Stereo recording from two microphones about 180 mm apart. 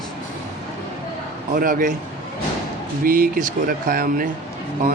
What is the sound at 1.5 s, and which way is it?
Speech, 50° right (ahead or behind).